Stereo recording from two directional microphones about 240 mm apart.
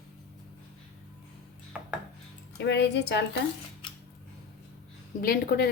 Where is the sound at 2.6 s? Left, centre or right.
Left.